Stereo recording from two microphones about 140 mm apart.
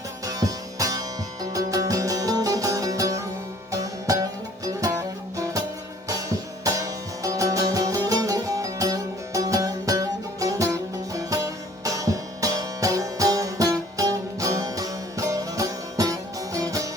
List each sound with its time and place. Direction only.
0.3 s music: 25° right (ahead or behind)